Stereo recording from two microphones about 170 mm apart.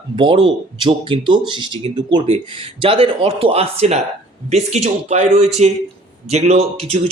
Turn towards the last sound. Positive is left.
turn(degrees=-35)  # may be behind; listen again after turning